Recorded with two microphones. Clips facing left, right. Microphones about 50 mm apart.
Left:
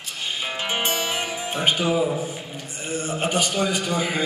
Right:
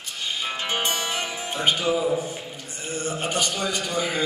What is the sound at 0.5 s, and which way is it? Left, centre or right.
Music, centre.